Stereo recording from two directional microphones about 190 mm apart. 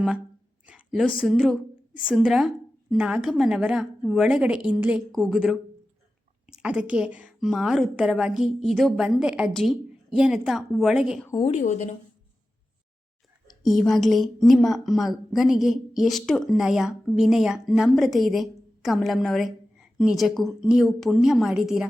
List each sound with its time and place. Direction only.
0.7 s a sound: 5° right (ahead or behind)
1.2 s a woman's voice: centre (ahead or behind)
11.3 s a woman's voice: 20° left (ahead or behind)
11.5 s speech: 40° left (ahead or behind)
13.7 s a woman's voice: centre (ahead or behind)